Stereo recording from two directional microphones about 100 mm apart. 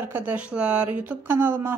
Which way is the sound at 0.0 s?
20° right (ahead or behind).